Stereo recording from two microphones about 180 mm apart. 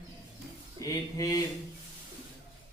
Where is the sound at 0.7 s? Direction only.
20° left (ahead or behind).